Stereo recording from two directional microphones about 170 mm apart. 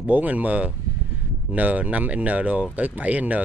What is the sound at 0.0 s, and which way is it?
Speech, 10° right (ahead or behind).